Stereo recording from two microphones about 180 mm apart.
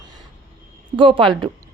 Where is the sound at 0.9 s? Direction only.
30° right (ahead or behind).